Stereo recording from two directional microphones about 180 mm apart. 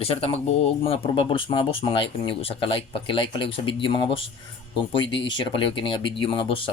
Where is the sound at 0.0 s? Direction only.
30° left (ahead or behind).